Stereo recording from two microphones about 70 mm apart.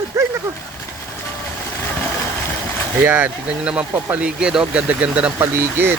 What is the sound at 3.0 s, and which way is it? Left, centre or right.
Speech, right.